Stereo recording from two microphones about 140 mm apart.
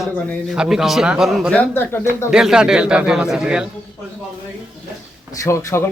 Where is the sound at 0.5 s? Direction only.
5° right (ahead or behind).